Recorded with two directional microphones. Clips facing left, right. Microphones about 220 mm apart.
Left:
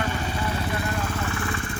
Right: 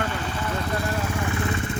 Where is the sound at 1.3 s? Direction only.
20° right (ahead or behind).